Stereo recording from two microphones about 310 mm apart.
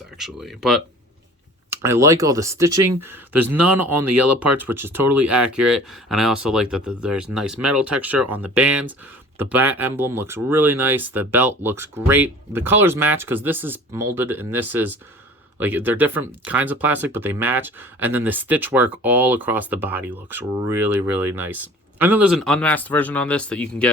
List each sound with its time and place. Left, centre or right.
0.2 s speech: centre
4.0 s speech: right
4.5 s speech: centre